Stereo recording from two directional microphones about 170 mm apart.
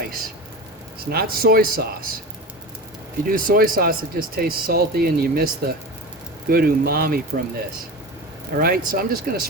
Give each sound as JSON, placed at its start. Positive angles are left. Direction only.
{"t": 0.9, "sound": "speech", "side_deg": -65}
{"t": 3.2, "sound": "speech", "side_deg": -55}
{"t": 8.5, "sound": "speech", "side_deg": -60}